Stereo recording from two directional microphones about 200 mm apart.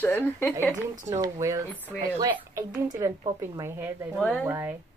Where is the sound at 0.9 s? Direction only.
35° right (ahead or behind).